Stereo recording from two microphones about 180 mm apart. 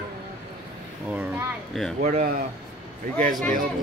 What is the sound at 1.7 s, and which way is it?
Speech, centre (ahead or behind).